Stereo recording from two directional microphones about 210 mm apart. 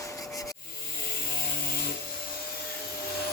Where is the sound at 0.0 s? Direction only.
15° left (ahead or behind).